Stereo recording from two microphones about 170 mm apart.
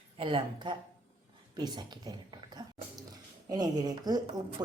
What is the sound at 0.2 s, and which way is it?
Speech, 30° right (ahead or behind).